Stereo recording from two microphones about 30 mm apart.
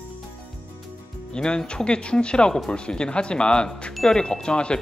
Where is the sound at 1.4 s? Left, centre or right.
Left.